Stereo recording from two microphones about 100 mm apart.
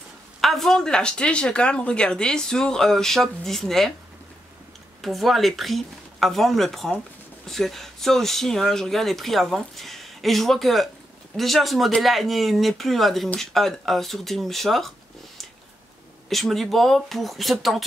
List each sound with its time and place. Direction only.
0.4 s speech: centre (ahead or behind)
5.0 s speech: centre (ahead or behind)
16.3 s speech: centre (ahead or behind)